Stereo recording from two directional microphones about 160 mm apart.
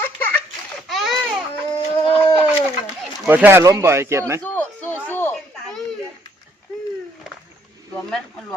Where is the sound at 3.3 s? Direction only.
15° right (ahead or behind).